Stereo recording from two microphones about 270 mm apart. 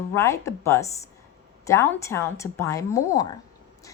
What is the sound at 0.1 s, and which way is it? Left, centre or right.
Speech, centre.